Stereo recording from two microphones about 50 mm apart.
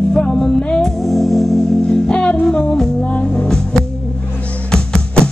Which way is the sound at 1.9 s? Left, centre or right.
Centre.